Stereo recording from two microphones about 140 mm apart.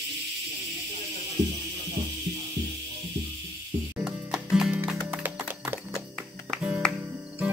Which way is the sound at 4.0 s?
5° right (ahead or behind).